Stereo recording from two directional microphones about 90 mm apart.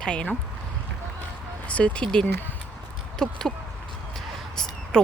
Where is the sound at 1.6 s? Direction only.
15° left (ahead or behind).